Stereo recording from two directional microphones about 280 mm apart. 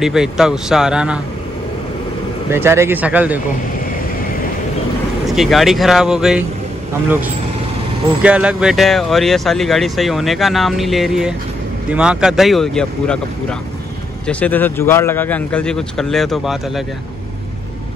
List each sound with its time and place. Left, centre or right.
0.0 s speech: centre
2.5 s speech: centre
5.2 s speech: centre
8.2 s speech: centre